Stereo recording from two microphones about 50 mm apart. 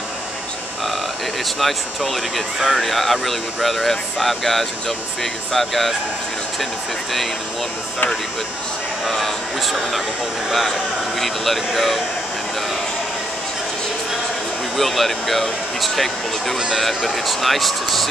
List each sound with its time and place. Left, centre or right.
1.6 s speech: centre
9.0 s speech: centre
11.1 s speech: centre
14.8 s speech: centre
16.5 s speech: centre
17.3 s speech: centre